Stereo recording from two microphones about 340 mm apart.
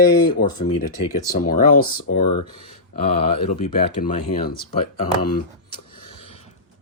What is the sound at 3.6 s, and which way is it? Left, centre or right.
Speech, left.